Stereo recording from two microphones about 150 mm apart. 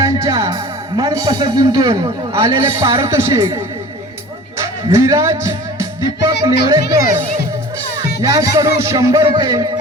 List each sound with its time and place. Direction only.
0.0 s speech: 25° right (ahead or behind)
4.5 s music: 20° right (ahead or behind)
6.4 s speech: 25° right (ahead or behind)
8.2 s speech: 25° right (ahead or behind)